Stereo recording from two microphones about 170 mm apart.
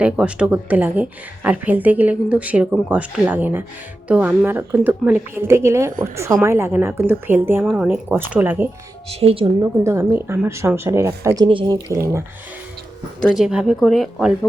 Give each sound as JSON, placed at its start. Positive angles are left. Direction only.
{"t": 0.0, "sound": "speech", "side_deg": -5}
{"t": 7.6, "sound": "speech", "side_deg": 0}
{"t": 9.0, "sound": "speech", "side_deg": -35}
{"t": 9.8, "sound": "speech", "side_deg": -15}
{"t": 11.4, "sound": "speech", "side_deg": -30}
{"t": 13.3, "sound": "speech", "side_deg": -5}